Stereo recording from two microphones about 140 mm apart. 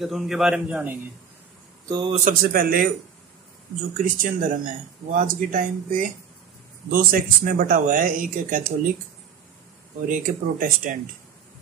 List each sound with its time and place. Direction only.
0.0 s a man's voice: centre (ahead or behind)
1.9 s speech: 30° right (ahead or behind)
2.1 s a man's voice: 80° right
4.0 s speech: 75° right (ahead or behind)
6.9 s speech: 90° right
10.0 s speech: 65° right (ahead or behind)